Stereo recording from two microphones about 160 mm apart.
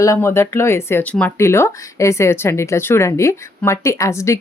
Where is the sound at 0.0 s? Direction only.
20° left (ahead or behind).